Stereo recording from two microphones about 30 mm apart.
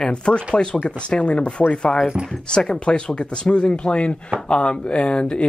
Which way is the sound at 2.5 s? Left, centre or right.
Left.